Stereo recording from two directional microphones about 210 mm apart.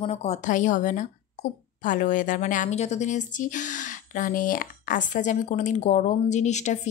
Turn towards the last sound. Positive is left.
turn(degrees=35)  # may be behind; listen again after turning